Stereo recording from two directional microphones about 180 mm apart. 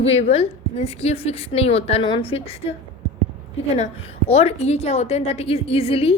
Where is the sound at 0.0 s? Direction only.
35° left (ahead or behind).